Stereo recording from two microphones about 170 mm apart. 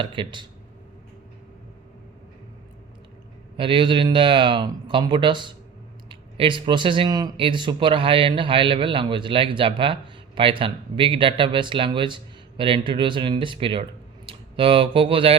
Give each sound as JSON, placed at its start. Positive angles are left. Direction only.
{"t": 0.0, "sound": "speech", "side_deg": -30}
{"t": 3.6, "sound": "speech", "side_deg": -30}